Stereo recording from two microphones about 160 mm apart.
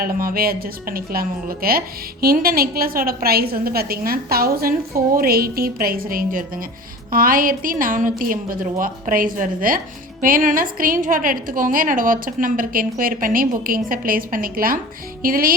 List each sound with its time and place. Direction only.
0.0 s a woman's voice: 65° right (ahead or behind)